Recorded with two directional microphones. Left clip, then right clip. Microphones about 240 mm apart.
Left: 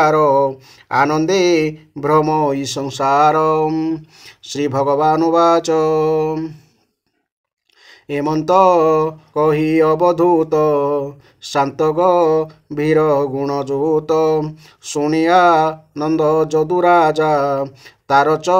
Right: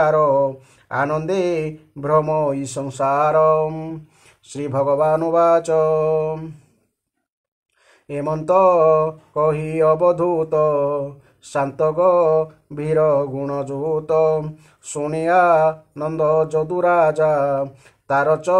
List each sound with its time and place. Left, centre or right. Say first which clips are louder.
0.0 s speech: left 3 dB; left
8.1 s speech: left 3 dB; left